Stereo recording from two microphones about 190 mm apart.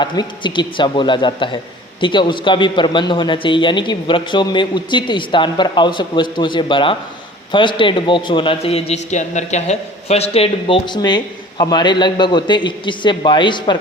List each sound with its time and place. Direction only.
0.0 s a man's voice: 25° left (ahead or behind)